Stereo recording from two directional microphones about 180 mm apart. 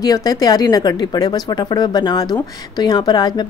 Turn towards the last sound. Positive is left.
turn(degrees=25)  # may be behind; listen again after turning